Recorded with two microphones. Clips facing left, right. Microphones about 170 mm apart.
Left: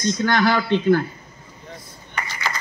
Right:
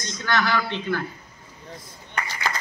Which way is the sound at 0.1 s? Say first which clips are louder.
Left 4 dB; 50° left (ahead or behind).